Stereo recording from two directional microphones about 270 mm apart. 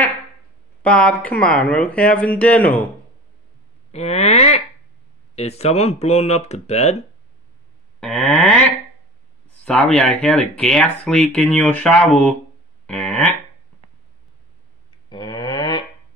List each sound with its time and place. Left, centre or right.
0.8 s speech: centre
3.9 s speech: left
8.0 s cattle: centre
9.7 s speech: centre
12.8 s a sound: centre
15.0 s a sound: centre